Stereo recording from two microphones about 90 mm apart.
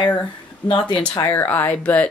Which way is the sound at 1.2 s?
25° left (ahead or behind).